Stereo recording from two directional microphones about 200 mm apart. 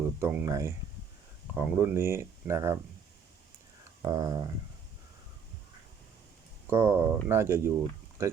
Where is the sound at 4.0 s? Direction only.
20° right (ahead or behind).